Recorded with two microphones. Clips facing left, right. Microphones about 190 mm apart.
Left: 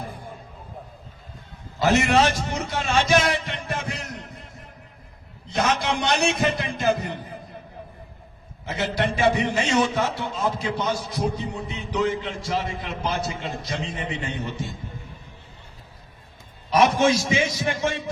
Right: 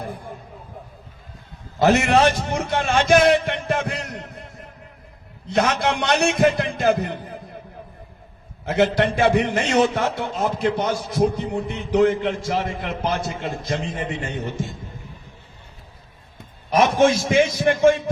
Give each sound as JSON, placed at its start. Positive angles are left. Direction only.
{"t": 1.8, "sound": "a man's voice", "side_deg": -55}
{"t": 5.5, "sound": "a man's voice", "side_deg": -60}
{"t": 8.6, "sound": "a man's voice", "side_deg": -55}
{"t": 16.4, "sound": "a sound", "side_deg": -55}
{"t": 16.9, "sound": "speech", "side_deg": -50}